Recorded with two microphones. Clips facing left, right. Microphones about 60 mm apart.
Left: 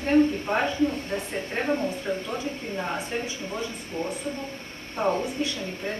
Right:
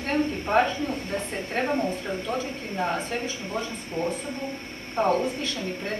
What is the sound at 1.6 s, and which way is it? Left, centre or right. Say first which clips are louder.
Speech: right 1 dB; centre.